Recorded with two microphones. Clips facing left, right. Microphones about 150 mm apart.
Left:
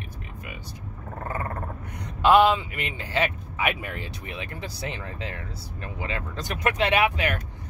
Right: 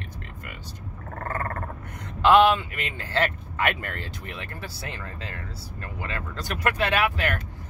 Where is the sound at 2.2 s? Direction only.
10° left (ahead or behind).